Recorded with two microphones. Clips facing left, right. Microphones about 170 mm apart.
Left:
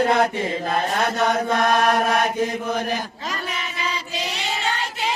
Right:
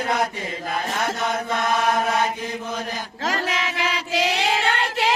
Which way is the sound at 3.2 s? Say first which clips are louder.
Right 5 dB; 90° right.